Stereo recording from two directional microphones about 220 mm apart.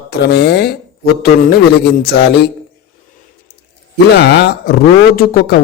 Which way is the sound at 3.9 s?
50° left (ahead or behind).